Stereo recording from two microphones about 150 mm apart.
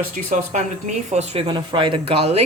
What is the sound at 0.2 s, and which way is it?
Speech, 60° right (ahead or behind).